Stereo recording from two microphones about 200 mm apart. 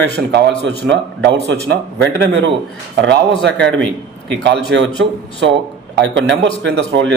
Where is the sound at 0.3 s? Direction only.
55° right (ahead or behind).